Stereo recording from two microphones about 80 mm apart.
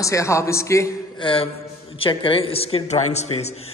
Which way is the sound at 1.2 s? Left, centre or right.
Left.